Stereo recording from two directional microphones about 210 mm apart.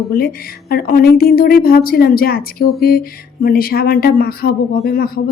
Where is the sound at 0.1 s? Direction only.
45° left (ahead or behind).